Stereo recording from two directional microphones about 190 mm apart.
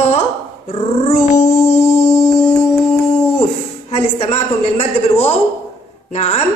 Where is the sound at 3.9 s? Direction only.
35° left (ahead or behind).